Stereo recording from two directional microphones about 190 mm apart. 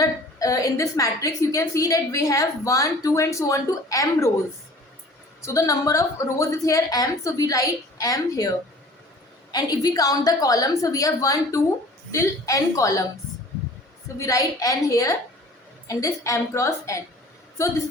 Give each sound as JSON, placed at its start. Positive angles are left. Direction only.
{"t": 0.0, "sound": "a woman's voice", "side_deg": 20}
{"t": 5.4, "sound": "a woman's voice", "side_deg": 15}
{"t": 14.2, "sound": "a woman's voice", "side_deg": 15}